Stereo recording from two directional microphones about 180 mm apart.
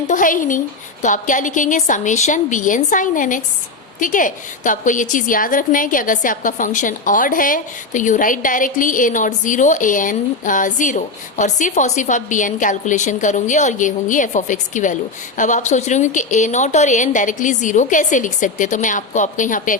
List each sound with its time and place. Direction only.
0.1 s a woman's voice: 45° left (ahead or behind)